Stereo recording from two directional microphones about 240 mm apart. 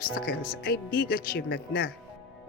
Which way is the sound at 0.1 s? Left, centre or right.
Left.